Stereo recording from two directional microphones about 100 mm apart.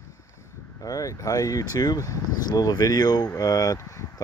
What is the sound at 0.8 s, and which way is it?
Speech, 35° left (ahead or behind).